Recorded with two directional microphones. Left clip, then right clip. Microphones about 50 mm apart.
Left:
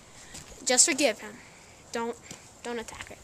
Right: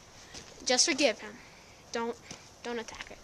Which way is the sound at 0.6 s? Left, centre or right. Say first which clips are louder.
Left 2 dB; centre.